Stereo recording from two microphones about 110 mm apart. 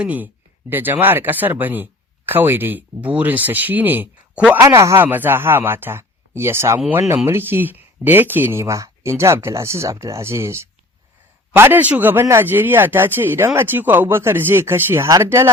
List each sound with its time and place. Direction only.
0.0 s speech: 15° right (ahead or behind)